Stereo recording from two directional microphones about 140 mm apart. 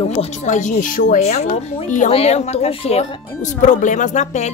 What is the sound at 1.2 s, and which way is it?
Speech, 50° left (ahead or behind).